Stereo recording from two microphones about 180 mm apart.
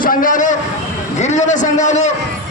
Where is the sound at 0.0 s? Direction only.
50° left (ahead or behind).